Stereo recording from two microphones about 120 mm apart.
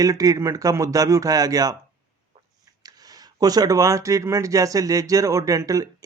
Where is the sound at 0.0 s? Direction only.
30° right (ahead or behind).